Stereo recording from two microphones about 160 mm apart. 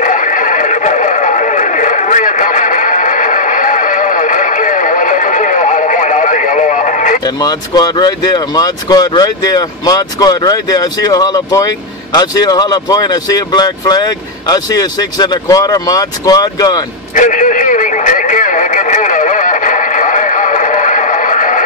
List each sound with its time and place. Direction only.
0.0 s radio: 55° left (ahead or behind)
7.2 s speech: 25° left (ahead or behind)
17.1 s a sound: 55° left (ahead or behind)